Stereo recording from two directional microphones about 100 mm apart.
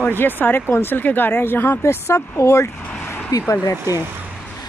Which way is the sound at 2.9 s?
20° left (ahead or behind).